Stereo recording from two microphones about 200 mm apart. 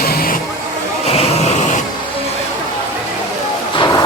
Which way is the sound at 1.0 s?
30° left (ahead or behind).